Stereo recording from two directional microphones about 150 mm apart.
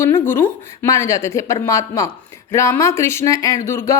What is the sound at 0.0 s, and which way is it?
A woman's voice, 15° left (ahead or behind).